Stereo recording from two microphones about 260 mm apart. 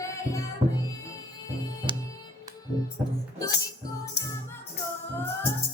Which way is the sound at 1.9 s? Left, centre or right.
Centre.